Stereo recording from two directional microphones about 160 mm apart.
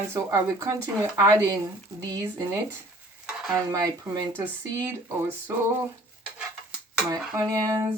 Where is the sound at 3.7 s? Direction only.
25° right (ahead or behind).